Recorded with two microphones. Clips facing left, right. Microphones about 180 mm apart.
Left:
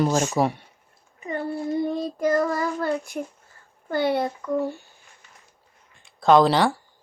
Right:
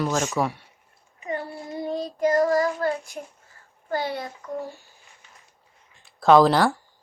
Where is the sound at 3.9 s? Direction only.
60° left (ahead or behind).